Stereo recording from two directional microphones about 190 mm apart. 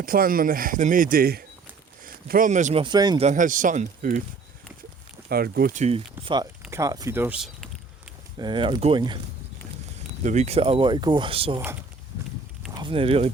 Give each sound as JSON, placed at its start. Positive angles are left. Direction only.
{"t": 0.0, "sound": "speech", "side_deg": -50}
{"t": 2.8, "sound": "speech", "side_deg": -20}
{"t": 3.2, "sound": "speech", "side_deg": -45}
{"t": 5.3, "sound": "speech", "side_deg": -50}
{"t": 6.6, "sound": "speech", "side_deg": -15}
{"t": 8.4, "sound": "speech", "side_deg": -25}
{"t": 10.2, "sound": "speech", "side_deg": -35}
{"t": 12.7, "sound": "speech", "side_deg": -25}